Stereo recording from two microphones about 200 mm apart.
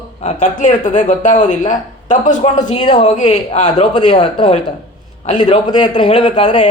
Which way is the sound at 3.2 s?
35° left (ahead or behind).